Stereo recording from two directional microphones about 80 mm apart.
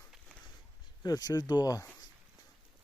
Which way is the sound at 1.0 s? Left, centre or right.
Left.